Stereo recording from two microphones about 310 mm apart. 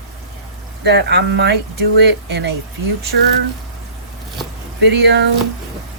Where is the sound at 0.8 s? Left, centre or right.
Right.